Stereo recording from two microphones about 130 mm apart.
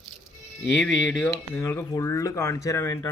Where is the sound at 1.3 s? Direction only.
30° left (ahead or behind).